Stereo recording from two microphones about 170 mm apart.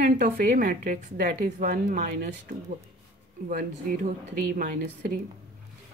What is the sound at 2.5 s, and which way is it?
Speech, 40° right (ahead or behind).